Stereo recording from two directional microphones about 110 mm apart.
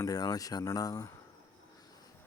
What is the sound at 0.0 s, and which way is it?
Speech, 35° left (ahead or behind).